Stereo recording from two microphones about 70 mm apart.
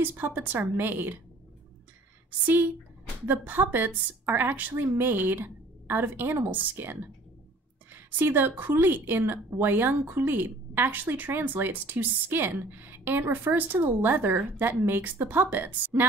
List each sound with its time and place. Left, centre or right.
0.0 s a woman's voice: right
3.3 s a woman's voice: right